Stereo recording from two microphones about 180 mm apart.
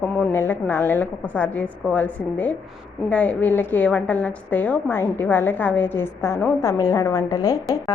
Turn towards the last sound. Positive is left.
turn(degrees=20)  # may be behind; listen again after turning